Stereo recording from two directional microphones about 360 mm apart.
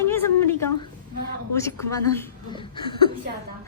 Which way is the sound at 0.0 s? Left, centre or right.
Centre.